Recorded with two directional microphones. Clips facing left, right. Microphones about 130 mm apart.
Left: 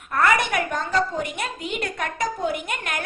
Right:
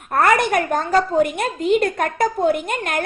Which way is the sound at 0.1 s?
50° right (ahead or behind).